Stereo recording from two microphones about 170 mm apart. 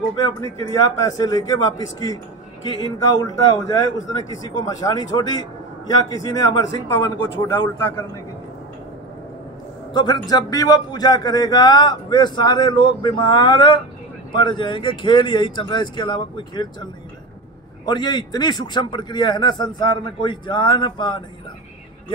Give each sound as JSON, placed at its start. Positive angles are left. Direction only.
{"t": 0.1, "sound": "speech", "side_deg": 25}
{"t": 6.3, "sound": "speech", "side_deg": 20}
{"t": 9.9, "sound": "speech", "side_deg": 25}